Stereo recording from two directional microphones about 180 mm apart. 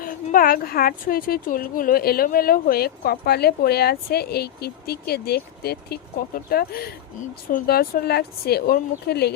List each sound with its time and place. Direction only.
0.0 s a woman's voice: 50° left (ahead or behind)